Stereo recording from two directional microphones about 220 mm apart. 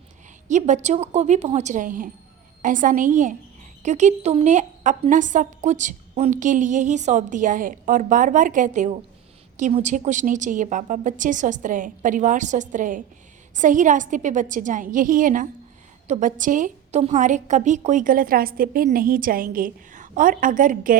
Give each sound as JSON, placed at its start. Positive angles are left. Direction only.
{"t": 0.4, "sound": "a woman's voice", "side_deg": -35}